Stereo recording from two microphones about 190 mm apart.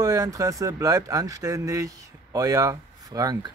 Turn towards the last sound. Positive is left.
turn(degrees=-20)  # may be behind; listen again after turning